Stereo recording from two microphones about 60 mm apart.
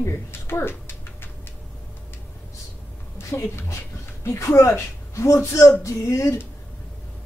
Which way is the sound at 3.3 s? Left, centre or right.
Left.